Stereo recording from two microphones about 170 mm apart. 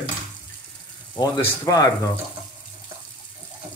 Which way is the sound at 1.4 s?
20° left (ahead or behind).